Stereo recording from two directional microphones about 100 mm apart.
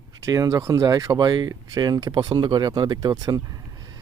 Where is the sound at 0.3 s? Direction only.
35° right (ahead or behind).